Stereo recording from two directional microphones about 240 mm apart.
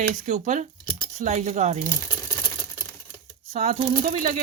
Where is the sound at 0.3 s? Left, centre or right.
Right.